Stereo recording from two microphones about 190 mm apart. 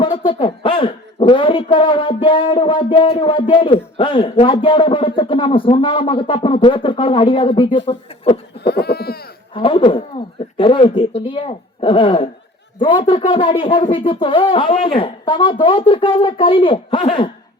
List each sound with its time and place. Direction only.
0.0 s speech: 25° left (ahead or behind)
8.6 s a sound: 60° left (ahead or behind)
9.6 s speech: 25° left (ahead or behind)